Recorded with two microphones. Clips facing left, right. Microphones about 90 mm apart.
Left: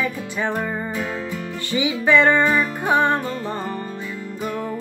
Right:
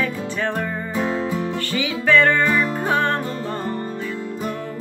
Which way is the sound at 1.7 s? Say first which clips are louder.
Left 1 dB; 20° left (ahead or behind).